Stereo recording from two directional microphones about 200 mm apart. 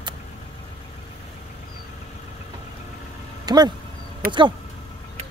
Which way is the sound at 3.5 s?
20° right (ahead or behind).